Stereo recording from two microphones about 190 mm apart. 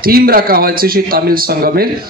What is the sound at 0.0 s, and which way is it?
A man's voice, 50° right (ahead or behind).